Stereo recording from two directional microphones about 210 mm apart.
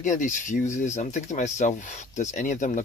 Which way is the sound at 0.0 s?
35° left (ahead or behind).